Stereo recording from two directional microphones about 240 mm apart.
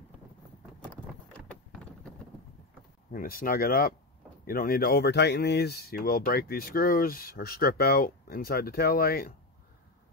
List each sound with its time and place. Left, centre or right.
3.1 s speech: left